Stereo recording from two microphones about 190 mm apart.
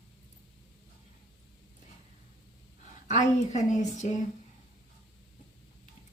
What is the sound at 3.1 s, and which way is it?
A woman's voice, 40° left (ahead or behind).